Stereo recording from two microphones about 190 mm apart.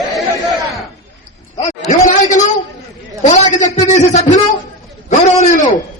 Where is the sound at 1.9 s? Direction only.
40° left (ahead or behind).